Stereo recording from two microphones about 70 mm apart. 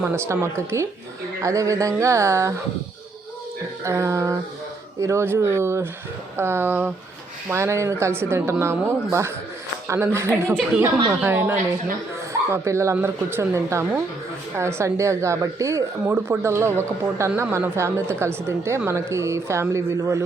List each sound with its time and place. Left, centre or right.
0.3 s speech: right
3.8 s speech: right
7.5 s speech: right
12.3 s speech: right
16.0 s speech: right
16.4 s speech: right